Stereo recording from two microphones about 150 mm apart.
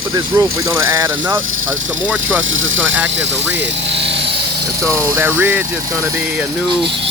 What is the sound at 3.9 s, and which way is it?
Vehicle, 40° right (ahead or behind).